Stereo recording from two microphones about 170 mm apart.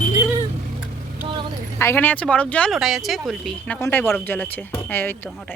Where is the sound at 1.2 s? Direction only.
30° right (ahead or behind).